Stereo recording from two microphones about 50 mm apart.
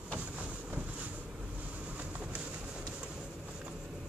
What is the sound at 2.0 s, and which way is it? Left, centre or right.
Train, right.